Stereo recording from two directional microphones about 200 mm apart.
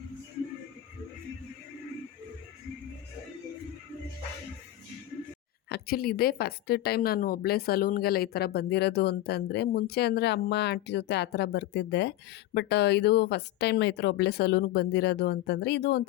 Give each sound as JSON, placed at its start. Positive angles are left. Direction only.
{"t": 5.6, "sound": "speech", "side_deg": 50}